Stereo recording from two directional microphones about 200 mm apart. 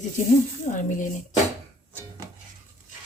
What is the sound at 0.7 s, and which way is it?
Speech, 40° left (ahead or behind).